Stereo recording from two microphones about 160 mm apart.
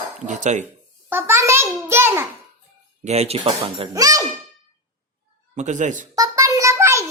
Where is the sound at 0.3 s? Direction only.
50° right (ahead or behind).